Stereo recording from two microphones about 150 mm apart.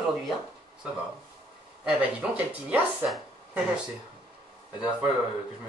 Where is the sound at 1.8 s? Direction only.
10° right (ahead or behind).